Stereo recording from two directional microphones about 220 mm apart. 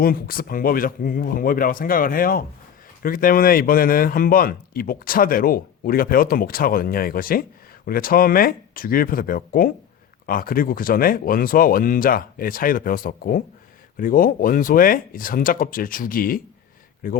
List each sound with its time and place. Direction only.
0.0 s speech: 40° left (ahead or behind)